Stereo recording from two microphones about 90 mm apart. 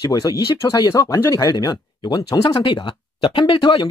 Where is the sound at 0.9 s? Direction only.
35° left (ahead or behind).